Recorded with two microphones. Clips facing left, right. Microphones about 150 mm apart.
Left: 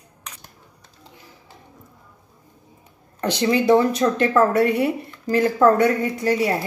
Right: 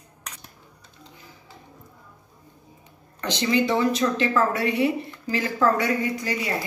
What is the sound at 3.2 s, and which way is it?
A woman's voice, 55° left (ahead or behind).